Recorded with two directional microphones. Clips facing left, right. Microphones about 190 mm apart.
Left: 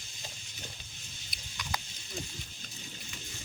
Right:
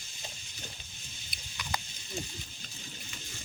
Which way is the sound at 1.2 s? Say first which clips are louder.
Right 1 dB; centre (ahead or behind).